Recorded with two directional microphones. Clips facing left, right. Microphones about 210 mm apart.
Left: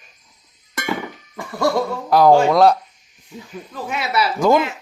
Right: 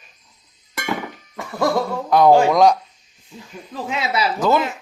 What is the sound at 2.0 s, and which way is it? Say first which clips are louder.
Speech: even; 5° left (ahead or behind).